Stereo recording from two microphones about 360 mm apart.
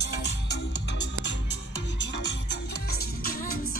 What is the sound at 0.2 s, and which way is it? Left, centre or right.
Music, left.